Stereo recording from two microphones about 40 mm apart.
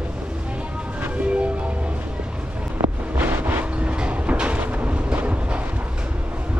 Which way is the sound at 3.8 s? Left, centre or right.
Right.